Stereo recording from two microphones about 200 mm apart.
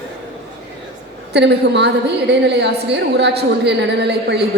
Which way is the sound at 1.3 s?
55° right (ahead or behind).